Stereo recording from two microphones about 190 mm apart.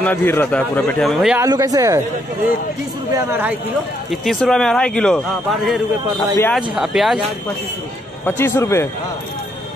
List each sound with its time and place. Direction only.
0.0 s a man's voice: 10° left (ahead or behind)
1.4 s speech: 20° right (ahead or behind)
4.1 s a man's voice: centre (ahead or behind)
8.3 s a man's voice: 10° left (ahead or behind)